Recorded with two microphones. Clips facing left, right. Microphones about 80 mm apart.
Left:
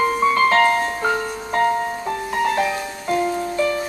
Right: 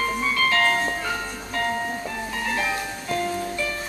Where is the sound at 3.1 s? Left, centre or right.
Left.